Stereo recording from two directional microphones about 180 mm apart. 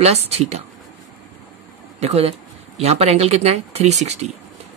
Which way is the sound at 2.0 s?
35° right (ahead or behind).